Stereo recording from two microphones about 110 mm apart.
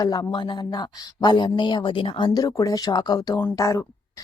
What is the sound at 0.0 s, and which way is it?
A woman's voice, 35° left (ahead or behind).